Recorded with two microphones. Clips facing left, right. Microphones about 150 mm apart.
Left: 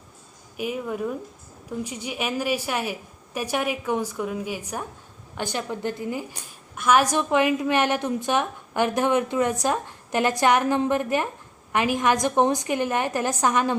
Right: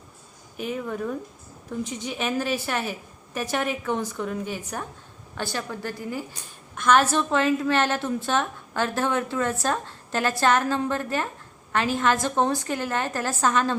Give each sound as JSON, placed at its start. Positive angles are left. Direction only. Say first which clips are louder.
{"t": 0.5, "sound": "a woman's voice", "louder": "left 1 dB", "side_deg": 10}
{"t": 6.7, "sound": "a woman's voice", "louder": "even", "side_deg": 10}